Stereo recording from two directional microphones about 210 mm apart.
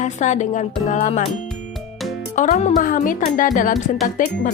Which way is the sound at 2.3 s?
35° left (ahead or behind).